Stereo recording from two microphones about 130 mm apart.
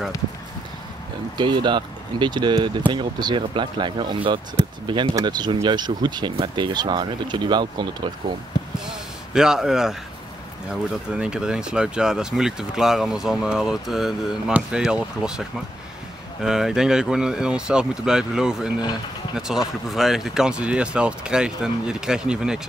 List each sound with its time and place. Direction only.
1.4 s speech: 35° right (ahead or behind)
9.3 s speech: 5° right (ahead or behind)
16.4 s speech: 5° right (ahead or behind)